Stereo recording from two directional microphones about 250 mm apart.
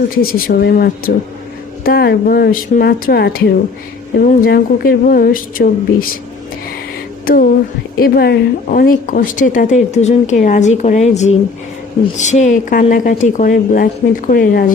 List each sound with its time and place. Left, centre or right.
0.2 s a woman's voice: left
7.9 s a woman's voice: left